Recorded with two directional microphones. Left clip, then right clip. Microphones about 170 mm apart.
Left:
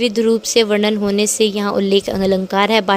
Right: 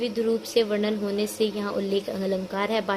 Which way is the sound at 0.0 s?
50° left (ahead or behind).